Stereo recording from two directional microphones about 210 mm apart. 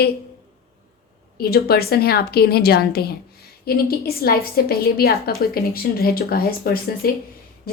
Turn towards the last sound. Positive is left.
turn(degrees=45)  # may be behind; listen again after turning